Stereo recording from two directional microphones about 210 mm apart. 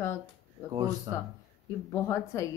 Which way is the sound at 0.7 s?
20° right (ahead or behind).